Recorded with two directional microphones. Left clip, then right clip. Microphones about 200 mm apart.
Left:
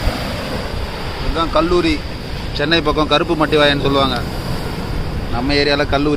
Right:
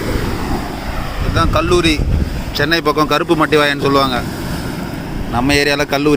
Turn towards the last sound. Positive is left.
turn(degrees=-15)  # may be behind; listen again after turning